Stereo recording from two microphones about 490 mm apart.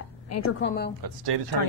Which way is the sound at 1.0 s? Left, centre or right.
Right.